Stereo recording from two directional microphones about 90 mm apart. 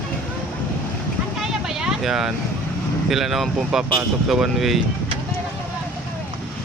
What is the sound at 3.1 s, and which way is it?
Speech, 5° right (ahead or behind).